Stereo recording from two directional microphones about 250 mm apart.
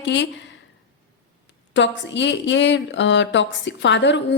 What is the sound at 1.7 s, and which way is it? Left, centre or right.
A woman's voice, left.